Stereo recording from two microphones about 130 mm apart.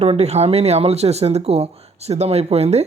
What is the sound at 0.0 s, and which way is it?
Speech, 55° right (ahead or behind).